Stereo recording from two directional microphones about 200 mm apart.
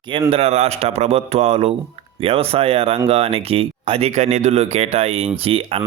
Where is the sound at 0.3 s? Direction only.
30° right (ahead or behind).